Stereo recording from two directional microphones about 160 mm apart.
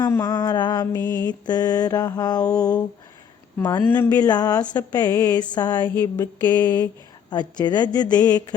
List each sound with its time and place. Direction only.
0.0 s mantra: 25° left (ahead or behind)
0.9 s speech: 10° left (ahead or behind)
1.3 s mantra: 25° left (ahead or behind)
2.5 s speech: 5° left (ahead or behind)
3.6 s mantra: 25° left (ahead or behind)
3.8 s speech: 15° left (ahead or behind)
4.3 s mantra: 25° left (ahead or behind)